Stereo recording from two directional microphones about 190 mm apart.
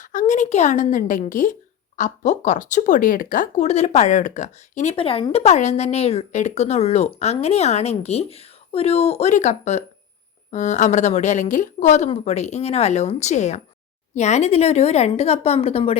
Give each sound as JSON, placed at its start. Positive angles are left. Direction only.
{"t": 0.0, "sound": "speech", "side_deg": 40}